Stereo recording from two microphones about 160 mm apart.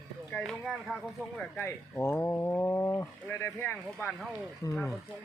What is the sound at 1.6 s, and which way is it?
Speech, 15° left (ahead or behind).